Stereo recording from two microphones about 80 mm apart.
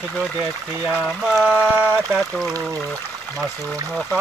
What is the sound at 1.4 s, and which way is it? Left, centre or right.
Speech, centre.